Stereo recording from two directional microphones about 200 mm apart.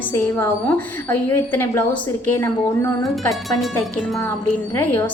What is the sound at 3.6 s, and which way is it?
Speech, centre (ahead or behind).